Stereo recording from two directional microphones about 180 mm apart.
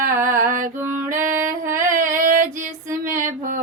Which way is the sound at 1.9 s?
50° right (ahead or behind).